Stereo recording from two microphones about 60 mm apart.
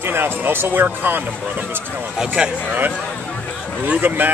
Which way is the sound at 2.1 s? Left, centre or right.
Centre.